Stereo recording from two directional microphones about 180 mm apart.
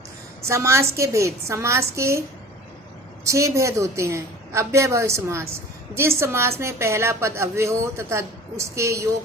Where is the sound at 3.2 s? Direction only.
15° right (ahead or behind).